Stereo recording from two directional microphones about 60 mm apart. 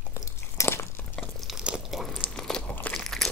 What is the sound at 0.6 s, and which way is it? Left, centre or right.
Crumpling, left.